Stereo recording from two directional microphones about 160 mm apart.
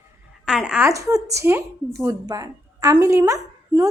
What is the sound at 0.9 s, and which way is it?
A woman's voice, 20° right (ahead or behind).